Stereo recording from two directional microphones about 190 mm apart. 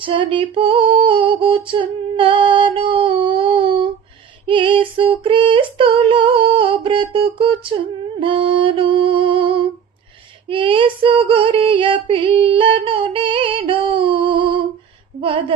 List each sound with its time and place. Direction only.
0.0 s female singing: 25° right (ahead or behind)